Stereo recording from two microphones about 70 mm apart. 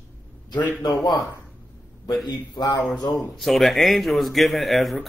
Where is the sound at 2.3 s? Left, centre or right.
Left.